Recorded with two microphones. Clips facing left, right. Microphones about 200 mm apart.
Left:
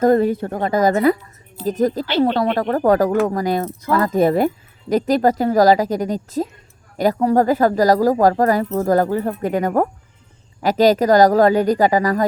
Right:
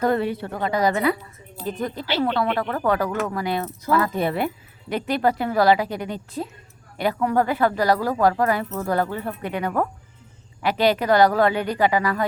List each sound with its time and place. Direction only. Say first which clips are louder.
0.0 s a woman's voice: left 7 dB; 45° left (ahead or behind)